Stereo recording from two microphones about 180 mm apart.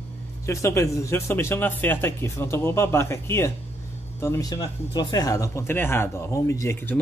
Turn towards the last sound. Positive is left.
turn(degrees=15)  # may be behind; listen again after turning